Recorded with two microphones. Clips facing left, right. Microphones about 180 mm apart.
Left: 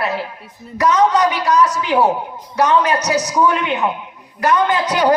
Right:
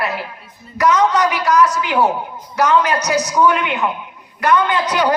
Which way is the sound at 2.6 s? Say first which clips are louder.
Even; 35° left (ahead or behind).